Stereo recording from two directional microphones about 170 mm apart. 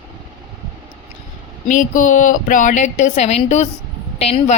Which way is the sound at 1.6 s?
50° left (ahead or behind).